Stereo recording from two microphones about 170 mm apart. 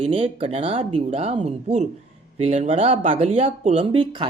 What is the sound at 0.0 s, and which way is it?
Speech, 35° right (ahead or behind).